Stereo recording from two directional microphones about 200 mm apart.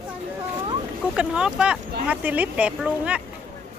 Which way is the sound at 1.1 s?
5° right (ahead or behind).